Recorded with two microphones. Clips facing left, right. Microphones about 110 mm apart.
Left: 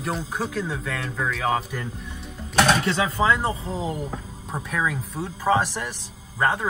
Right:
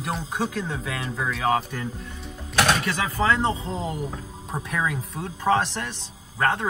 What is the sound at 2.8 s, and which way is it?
Speech, 25° left (ahead or behind).